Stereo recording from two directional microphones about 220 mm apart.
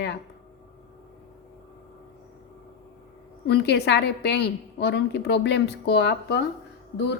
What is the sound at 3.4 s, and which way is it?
Speech, 50° left (ahead or behind).